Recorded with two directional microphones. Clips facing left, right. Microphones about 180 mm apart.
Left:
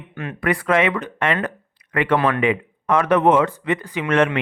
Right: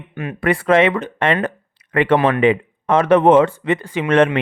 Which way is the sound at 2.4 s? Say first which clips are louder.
Right 5 dB; 30° right (ahead or behind).